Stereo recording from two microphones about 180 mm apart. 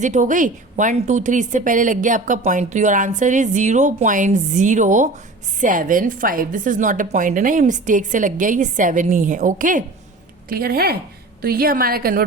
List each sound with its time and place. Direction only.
0.0 s a woman's voice: 45° right (ahead or behind)
10.5 s a woman's voice: 55° right (ahead or behind)